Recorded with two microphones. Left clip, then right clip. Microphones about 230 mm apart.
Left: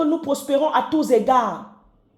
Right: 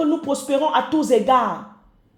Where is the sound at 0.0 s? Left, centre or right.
Centre.